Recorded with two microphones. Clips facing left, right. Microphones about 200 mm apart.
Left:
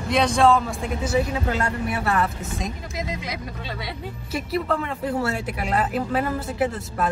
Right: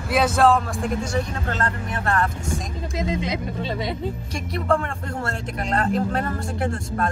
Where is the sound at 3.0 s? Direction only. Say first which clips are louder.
Right 6 dB; 25° right (ahead or behind).